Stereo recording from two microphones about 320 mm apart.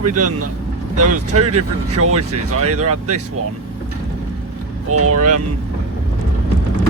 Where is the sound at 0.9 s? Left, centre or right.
Right.